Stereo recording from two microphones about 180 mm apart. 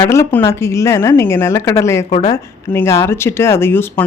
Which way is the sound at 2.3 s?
15° left (ahead or behind).